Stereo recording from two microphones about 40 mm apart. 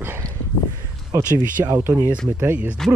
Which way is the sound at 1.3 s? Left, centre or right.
Right.